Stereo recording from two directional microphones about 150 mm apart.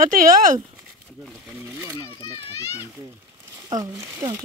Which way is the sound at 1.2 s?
15° right (ahead or behind).